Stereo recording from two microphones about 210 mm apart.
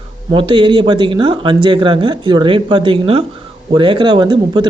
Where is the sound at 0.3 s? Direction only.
25° right (ahead or behind).